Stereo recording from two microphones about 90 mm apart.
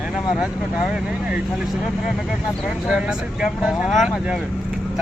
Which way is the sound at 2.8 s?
10° right (ahead or behind).